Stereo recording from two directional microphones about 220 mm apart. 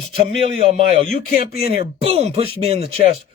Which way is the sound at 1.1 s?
40° left (ahead or behind).